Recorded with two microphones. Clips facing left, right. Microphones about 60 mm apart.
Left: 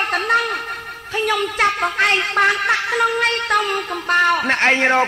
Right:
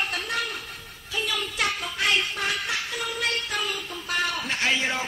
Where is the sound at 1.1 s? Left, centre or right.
Left.